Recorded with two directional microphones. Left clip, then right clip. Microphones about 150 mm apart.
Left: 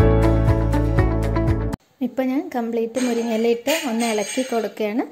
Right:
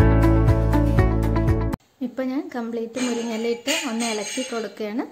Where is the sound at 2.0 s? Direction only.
20° left (ahead or behind).